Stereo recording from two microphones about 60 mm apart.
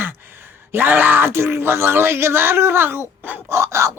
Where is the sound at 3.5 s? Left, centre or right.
Right.